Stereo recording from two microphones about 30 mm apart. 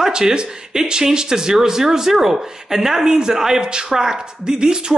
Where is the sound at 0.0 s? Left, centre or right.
Right.